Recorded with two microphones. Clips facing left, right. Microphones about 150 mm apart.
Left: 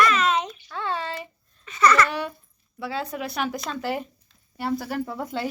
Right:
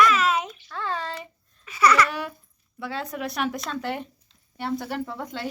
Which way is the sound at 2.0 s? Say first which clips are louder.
Left 2 dB; centre (ahead or behind).